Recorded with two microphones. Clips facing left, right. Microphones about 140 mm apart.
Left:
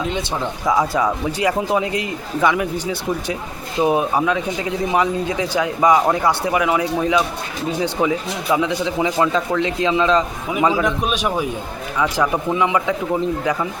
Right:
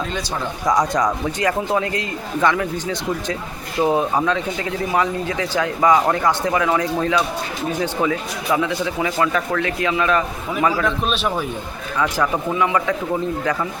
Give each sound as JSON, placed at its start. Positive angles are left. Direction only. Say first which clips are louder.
{"t": 0.7, "sound": "speech", "louder": "even", "side_deg": 5}